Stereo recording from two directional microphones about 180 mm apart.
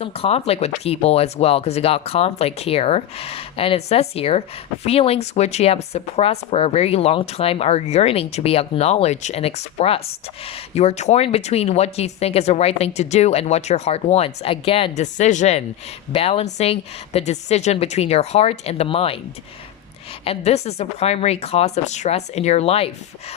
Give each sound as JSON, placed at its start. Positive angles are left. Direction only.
{"t": 0.0, "sound": "speech", "side_deg": 35}
{"t": 20.2, "sound": "speech", "side_deg": 35}